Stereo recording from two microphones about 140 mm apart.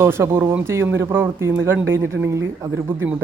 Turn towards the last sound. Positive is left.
turn(degrees=-15)  # may be behind; listen again after turning